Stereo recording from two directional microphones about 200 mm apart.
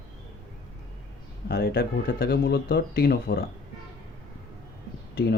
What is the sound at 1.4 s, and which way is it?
Speech, 50° left (ahead or behind).